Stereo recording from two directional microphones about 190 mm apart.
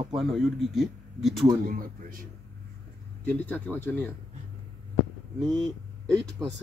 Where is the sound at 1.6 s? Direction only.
50° right (ahead or behind).